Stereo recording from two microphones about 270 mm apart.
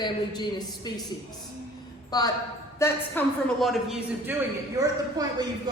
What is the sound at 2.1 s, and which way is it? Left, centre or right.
A woman's voice, centre.